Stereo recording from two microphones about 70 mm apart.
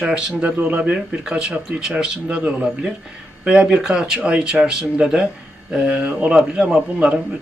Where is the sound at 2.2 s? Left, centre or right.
Right.